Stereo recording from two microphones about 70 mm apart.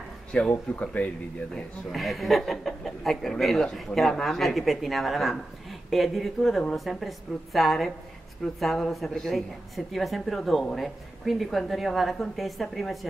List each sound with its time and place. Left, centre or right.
0.3 s speech: centre
1.5 s a man's voice: centre